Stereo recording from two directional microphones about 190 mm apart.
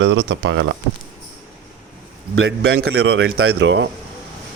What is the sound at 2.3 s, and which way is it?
A man's voice, 90° right.